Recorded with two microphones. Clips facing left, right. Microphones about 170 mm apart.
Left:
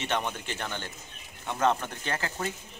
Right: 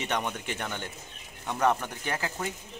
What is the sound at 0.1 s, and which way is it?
A man's voice, centre (ahead or behind).